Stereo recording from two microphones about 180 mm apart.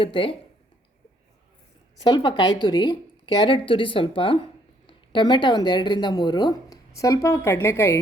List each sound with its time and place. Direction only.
0.0 s speech: 30° left (ahead or behind)
2.0 s speech: 25° left (ahead or behind)